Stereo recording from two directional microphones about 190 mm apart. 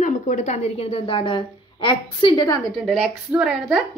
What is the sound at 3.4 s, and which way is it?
Speech, centre (ahead or behind).